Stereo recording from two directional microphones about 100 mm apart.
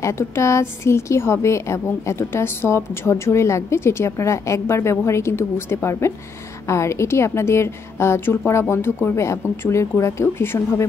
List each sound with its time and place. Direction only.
0.0 s a woman's voice: 30° left (ahead or behind)